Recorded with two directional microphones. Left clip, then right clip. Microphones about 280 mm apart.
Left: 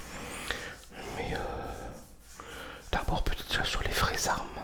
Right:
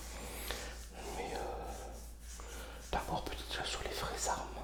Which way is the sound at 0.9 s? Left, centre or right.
Left.